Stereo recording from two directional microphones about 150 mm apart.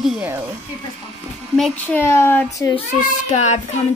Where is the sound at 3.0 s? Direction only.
50° left (ahead or behind).